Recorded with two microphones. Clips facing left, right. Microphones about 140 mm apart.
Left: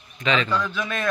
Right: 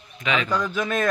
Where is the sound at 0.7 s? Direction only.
45° right (ahead or behind).